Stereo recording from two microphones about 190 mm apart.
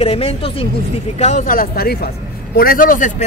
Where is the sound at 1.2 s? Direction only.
40° left (ahead or behind).